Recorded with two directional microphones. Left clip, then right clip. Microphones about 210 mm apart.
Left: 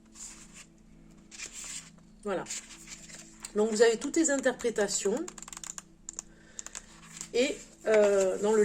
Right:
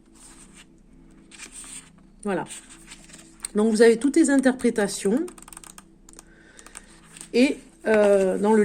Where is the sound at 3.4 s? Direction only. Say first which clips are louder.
Right 7 dB; 45° right (ahead or behind).